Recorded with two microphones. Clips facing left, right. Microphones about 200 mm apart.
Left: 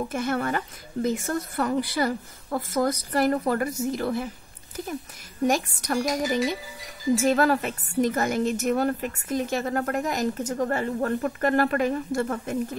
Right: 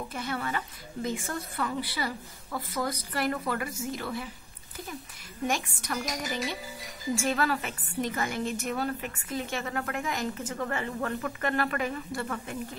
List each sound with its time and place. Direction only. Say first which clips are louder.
0.1 s speech: left 5 dB; 45° left (ahead or behind)
5.5 s a woman's voice: left 6 dB; 40° left (ahead or behind)